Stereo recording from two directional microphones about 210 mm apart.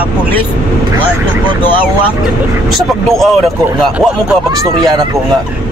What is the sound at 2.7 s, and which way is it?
Speech, centre (ahead or behind).